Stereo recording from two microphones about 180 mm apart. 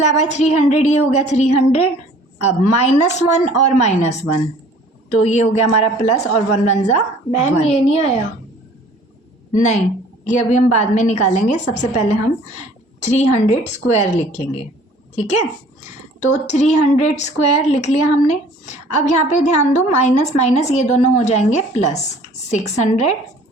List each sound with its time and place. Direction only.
0.0 s a woman's voice: 40° left (ahead or behind)
10.2 s a woman's voice: 40° left (ahead or behind)